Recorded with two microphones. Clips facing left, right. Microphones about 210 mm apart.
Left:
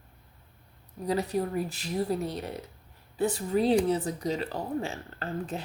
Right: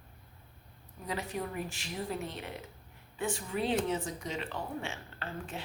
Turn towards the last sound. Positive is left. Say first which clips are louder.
# left 7 dB
turn(degrees=35)  # may be behind; listen again after turning